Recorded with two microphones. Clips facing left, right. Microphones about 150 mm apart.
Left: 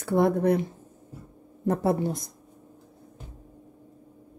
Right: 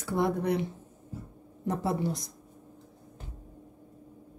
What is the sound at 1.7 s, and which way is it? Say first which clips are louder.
Speech: left 5 dB; 55° left (ahead or behind).